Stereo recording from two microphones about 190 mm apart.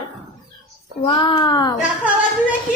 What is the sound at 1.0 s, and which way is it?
Speech, 30° left (ahead or behind).